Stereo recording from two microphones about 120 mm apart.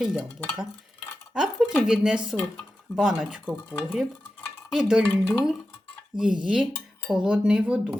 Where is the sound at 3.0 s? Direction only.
10° right (ahead or behind).